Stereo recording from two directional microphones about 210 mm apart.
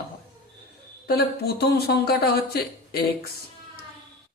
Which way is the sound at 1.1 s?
50° left (ahead or behind).